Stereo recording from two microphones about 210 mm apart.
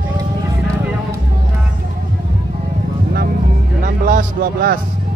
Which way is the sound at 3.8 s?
40° right (ahead or behind).